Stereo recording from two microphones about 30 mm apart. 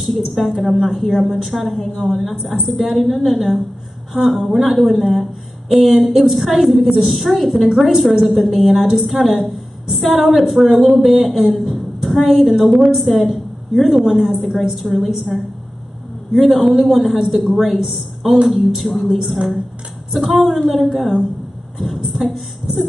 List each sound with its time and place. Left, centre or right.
0.1 s a woman's voice: centre
7.7 s a woman's voice: centre
8.3 s a woman's voice: centre
11.5 s a sound: centre
12.4 s a woman's voice: centre
13.8 s a woman's voice: centre
14.6 s a woman's voice: centre
16.3 s a man's voice: centre